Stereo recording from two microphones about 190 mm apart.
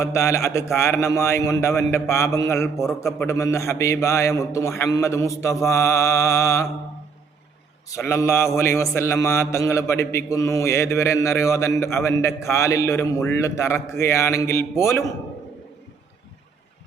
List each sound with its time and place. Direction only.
0.0 s mantra: 15° left (ahead or behind)
7.9 s mantra: 15° left (ahead or behind)